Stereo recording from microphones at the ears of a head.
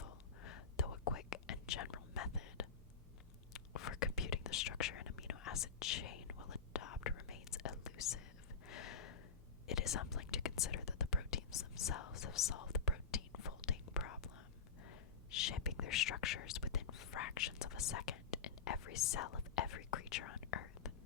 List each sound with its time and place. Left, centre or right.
0.0 s whispering: left
8.6 s a sound: left
9.6 s whispering: left